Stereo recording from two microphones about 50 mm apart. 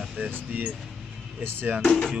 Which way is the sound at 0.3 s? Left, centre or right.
Right.